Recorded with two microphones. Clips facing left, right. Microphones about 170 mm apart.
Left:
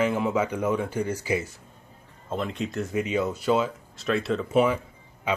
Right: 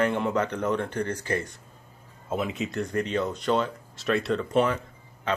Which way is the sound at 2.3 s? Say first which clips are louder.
Even; 5° right (ahead or behind).